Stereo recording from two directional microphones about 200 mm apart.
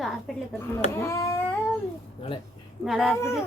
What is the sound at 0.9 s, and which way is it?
Cat, 15° left (ahead or behind).